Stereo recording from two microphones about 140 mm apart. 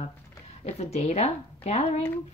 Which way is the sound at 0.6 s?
50° left (ahead or behind).